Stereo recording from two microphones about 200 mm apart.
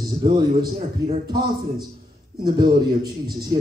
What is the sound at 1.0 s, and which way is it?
Speech, 15° right (ahead or behind).